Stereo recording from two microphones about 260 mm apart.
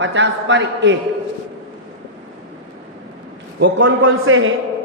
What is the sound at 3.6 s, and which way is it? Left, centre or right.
Speech, right.